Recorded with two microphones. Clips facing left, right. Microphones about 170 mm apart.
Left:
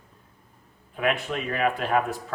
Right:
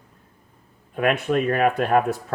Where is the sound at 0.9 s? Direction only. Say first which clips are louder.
Right 6 dB; 50° right (ahead or behind).